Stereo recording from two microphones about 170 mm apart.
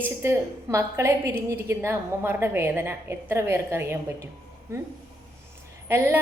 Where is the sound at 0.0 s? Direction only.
15° right (ahead or behind).